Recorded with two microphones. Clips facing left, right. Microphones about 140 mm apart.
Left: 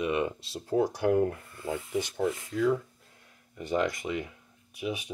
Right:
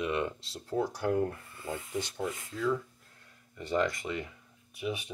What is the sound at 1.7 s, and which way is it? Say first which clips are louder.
Speech: left 4 dB; 45° left (ahead or behind).